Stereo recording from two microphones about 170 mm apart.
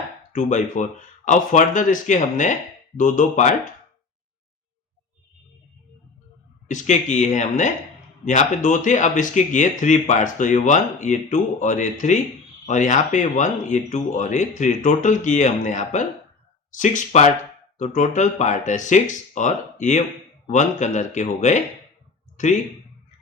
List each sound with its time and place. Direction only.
0.3 s speech: 45° left (ahead or behind)
6.7 s speech: 45° left (ahead or behind)